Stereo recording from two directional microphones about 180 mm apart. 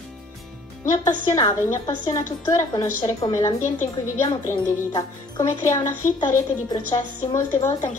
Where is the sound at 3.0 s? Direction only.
30° left (ahead or behind).